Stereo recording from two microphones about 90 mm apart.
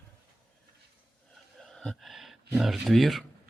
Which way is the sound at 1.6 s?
5° left (ahead or behind).